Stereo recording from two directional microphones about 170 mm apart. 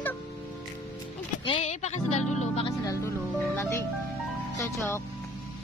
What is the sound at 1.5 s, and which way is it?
Music, 40° left (ahead or behind).